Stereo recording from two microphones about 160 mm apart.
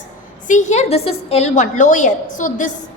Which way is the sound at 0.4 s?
50° left (ahead or behind).